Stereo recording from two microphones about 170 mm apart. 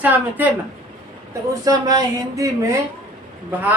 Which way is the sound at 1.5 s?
20° right (ahead or behind).